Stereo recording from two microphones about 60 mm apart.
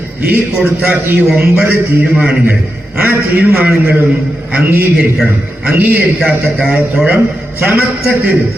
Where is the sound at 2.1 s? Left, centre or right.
Centre.